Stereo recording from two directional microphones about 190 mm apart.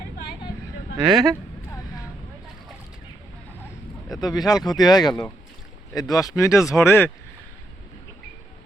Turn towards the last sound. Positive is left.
turn(degrees=15)  # may be behind; listen again after turning